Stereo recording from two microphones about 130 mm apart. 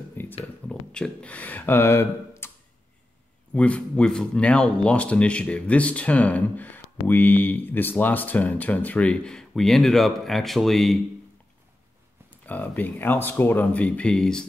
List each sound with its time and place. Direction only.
0.1 s a sound: 15° left (ahead or behind)
0.7 s speech: 10° left (ahead or behind)
3.5 s speech: 10° left (ahead or behind)
12.4 s speech: 10° left (ahead or behind)